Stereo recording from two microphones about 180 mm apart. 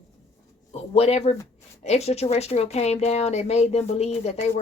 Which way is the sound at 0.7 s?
35° left (ahead or behind).